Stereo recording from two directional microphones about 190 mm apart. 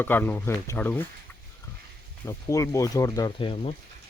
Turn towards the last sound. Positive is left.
turn(degrees=25)  # may be behind; listen again after turning